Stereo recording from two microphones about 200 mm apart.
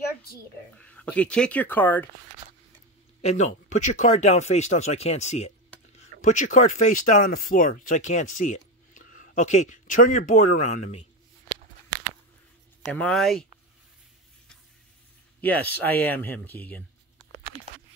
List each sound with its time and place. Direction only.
0.7 s speech: 5° left (ahead or behind)
3.2 s speech: 35° left (ahead or behind)
12.9 s speech: 5° left (ahead or behind)
15.4 s speech: 10° left (ahead or behind)